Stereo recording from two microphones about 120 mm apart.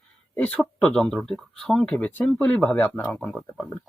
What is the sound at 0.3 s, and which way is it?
Speech, 15° left (ahead or behind).